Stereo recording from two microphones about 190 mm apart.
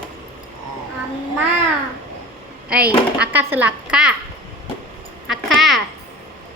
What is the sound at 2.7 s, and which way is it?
A child's voice, 5° right (ahead or behind).